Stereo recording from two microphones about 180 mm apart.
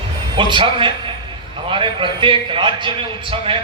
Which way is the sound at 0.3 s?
25° right (ahead or behind).